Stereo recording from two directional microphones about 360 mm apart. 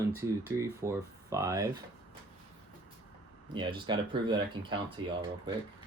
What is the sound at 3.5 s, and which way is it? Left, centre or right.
Speech, centre.